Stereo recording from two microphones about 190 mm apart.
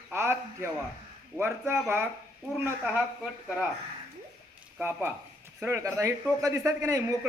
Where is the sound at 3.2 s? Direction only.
Centre (ahead or behind).